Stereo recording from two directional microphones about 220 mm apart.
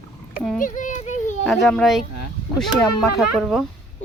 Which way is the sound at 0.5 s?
35° left (ahead or behind).